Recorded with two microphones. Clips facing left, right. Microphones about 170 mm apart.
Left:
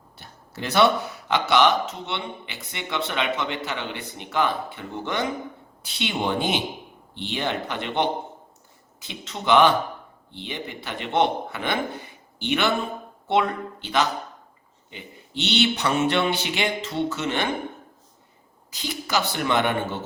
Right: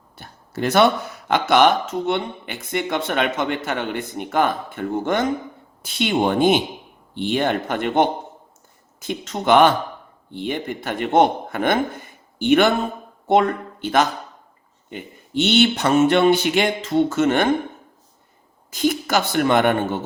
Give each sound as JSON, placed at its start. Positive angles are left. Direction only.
{"t": 0.2, "sound": "a sound", "side_deg": -50}
{"t": 1.3, "sound": "speech", "side_deg": -50}
{"t": 18.7, "sound": "speech", "side_deg": -50}